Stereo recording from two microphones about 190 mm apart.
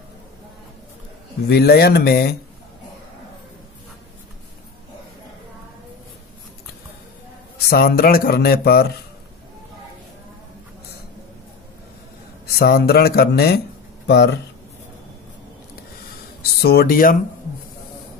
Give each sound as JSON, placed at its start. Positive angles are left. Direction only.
{"t": 1.5, "sound": "speech", "side_deg": 55}
{"t": 7.7, "sound": "speech", "side_deg": 50}
{"t": 12.5, "sound": "speech", "side_deg": 55}
{"t": 16.6, "sound": "speech", "side_deg": 50}